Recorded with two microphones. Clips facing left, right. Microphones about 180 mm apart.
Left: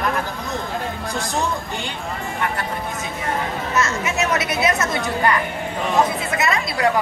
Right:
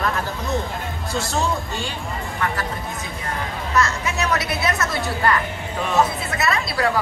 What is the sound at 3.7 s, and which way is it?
A woman's voice, 20° left (ahead or behind).